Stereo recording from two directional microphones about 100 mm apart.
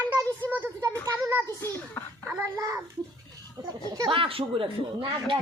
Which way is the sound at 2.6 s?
30° right (ahead or behind).